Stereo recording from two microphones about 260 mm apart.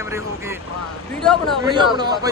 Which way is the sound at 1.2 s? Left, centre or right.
Centre.